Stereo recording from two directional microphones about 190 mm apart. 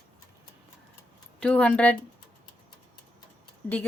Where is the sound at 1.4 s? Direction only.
5° left (ahead or behind).